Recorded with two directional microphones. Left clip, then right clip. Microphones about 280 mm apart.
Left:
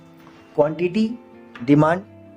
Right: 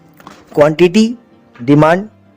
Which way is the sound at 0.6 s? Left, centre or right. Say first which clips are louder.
Right 16 dB; right.